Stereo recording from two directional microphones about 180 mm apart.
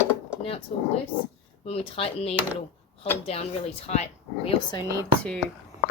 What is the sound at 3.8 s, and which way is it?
Speech, 35° left (ahead or behind).